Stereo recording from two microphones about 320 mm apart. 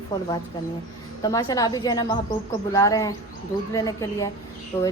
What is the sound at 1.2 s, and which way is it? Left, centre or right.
A woman's voice, centre.